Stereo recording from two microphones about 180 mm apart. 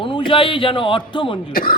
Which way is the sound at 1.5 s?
50° left (ahead or behind).